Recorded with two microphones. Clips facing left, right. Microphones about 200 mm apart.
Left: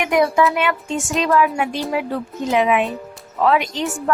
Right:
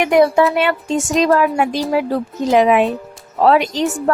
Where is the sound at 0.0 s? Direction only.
35° right (ahead or behind).